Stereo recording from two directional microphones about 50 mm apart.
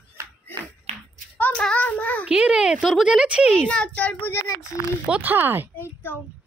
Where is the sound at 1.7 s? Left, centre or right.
Left.